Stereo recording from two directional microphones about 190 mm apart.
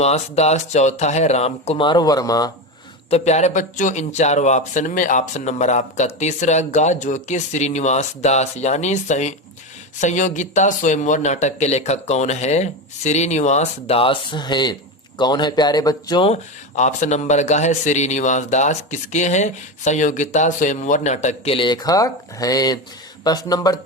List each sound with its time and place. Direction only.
0.0 s speech: 35° left (ahead or behind); by 2.5 s 20° left (ahead or behind)
3.1 s speech: 35° left (ahead or behind); by 23.8 s 20° left (ahead or behind)